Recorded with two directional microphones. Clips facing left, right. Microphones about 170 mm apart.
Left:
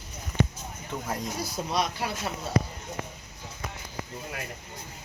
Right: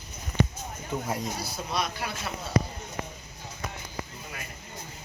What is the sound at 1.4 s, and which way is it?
Speech, 35° left (ahead or behind).